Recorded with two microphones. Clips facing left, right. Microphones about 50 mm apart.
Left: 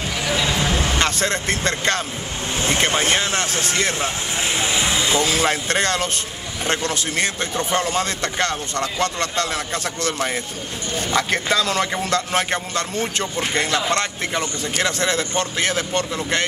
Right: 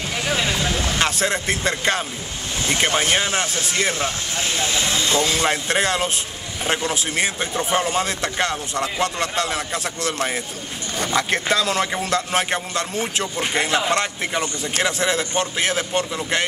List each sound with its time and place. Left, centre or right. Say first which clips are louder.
0.6 s vehicle: left 2 dB; left
0.9 s speech: even; centre
3.2 s speech: even; centre
4.4 s speech: left 1 dB; centre
5.2 s speech: left 1 dB; centre